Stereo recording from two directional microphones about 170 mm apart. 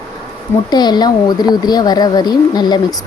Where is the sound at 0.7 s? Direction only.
25° left (ahead or behind).